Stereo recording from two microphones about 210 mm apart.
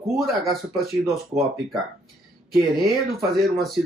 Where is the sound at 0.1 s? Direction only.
Centre (ahead or behind).